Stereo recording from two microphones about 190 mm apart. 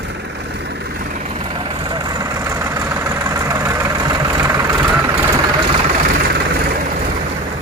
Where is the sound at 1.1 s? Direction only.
35° right (ahead or behind); by 5.2 s 15° right (ahead or behind).